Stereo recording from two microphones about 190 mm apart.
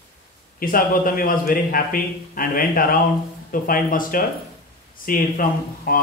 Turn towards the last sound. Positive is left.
turn(degrees=50)  # may be behind; listen again after turning